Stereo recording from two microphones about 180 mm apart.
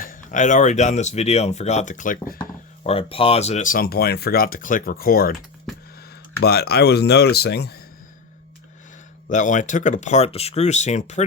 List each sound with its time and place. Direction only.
0.0 s speech: 45° left (ahead or behind)
2.8 s speech: 35° left (ahead or behind); by 5.4 s 55° left (ahead or behind)
6.4 s speech: 60° left (ahead or behind)
9.3 s speech: 45° left (ahead or behind)